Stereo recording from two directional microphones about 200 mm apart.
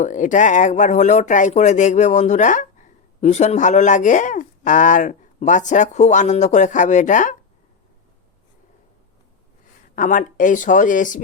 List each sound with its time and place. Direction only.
0.0 s speech: 40° left (ahead or behind)
9.9 s speech: 40° left (ahead or behind)